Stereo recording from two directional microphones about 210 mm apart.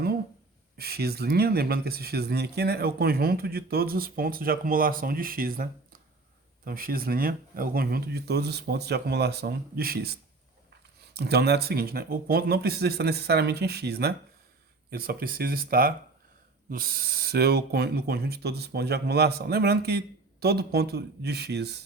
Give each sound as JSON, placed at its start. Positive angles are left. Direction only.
{"t": 0.8, "sound": "speech", "side_deg": -50}